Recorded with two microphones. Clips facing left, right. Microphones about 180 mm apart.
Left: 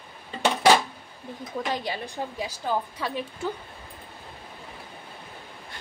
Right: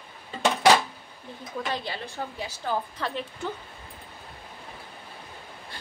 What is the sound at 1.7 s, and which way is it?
A woman's voice, 15° left (ahead or behind).